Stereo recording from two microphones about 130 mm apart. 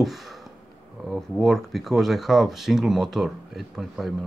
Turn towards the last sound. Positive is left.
turn(degrees=0)  # may be behind; listen again after turning